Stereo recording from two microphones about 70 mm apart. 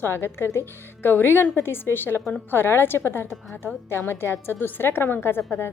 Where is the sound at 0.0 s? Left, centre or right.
Left.